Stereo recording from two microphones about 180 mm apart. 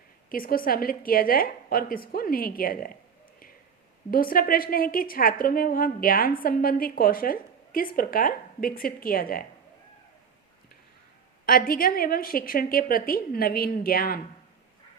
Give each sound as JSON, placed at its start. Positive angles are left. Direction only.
{"t": 0.3, "sound": "a woman's voice", "side_deg": 55}
{"t": 4.1, "sound": "a woman's voice", "side_deg": 50}
{"t": 11.4, "sound": "a woman's voice", "side_deg": 50}